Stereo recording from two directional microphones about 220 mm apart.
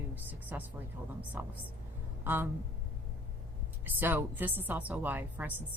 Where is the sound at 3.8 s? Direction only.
10° right (ahead or behind).